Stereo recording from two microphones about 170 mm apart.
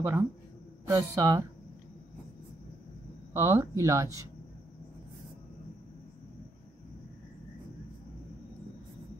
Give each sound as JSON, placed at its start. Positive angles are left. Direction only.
{"t": 0.0, "sound": "speech", "side_deg": -15}
{"t": 3.3, "sound": "speech", "side_deg": -15}